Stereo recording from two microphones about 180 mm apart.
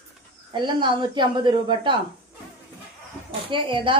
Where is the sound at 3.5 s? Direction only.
30° right (ahead or behind).